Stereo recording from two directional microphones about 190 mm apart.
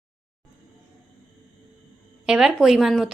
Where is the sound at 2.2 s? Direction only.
5° right (ahead or behind).